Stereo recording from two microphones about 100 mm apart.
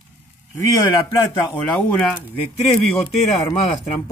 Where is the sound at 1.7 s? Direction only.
10° left (ahead or behind).